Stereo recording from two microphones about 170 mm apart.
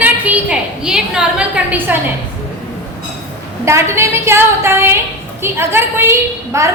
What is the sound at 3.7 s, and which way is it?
A woman's voice, 15° right (ahead or behind).